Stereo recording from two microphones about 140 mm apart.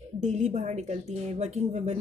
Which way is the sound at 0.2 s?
55° right (ahead or behind).